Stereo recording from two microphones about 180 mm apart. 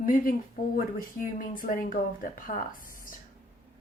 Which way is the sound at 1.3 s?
50° left (ahead or behind).